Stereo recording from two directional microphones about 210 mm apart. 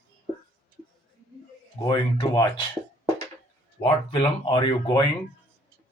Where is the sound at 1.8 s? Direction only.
20° left (ahead or behind).